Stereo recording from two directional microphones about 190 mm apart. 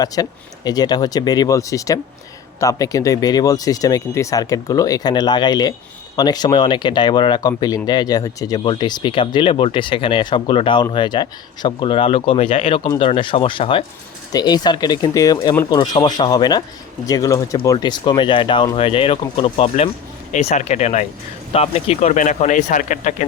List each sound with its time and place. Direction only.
0.0 s speech: 20° left (ahead or behind); by 23.2 s 40° left (ahead or behind)